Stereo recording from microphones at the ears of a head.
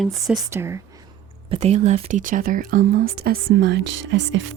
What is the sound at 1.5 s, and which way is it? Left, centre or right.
Speech, right.